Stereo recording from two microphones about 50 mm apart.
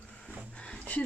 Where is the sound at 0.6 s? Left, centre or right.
Left.